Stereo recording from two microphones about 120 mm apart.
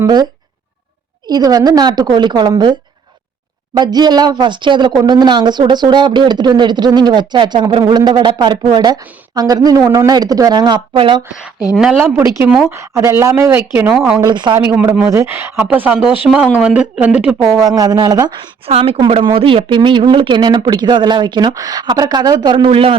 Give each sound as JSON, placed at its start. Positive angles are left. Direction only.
{"t": 1.3, "sound": "speech", "side_deg": -30}
{"t": 3.8, "sound": "speech", "side_deg": -35}
{"t": 11.7, "sound": "speech", "side_deg": -5}
{"t": 12.1, "sound": "speech", "side_deg": -20}
{"t": 14.2, "sound": "speech", "side_deg": -40}
{"t": 14.7, "sound": "speech", "side_deg": -15}
{"t": 17.4, "sound": "speech", "side_deg": -25}
{"t": 18.6, "sound": "speech", "side_deg": -50}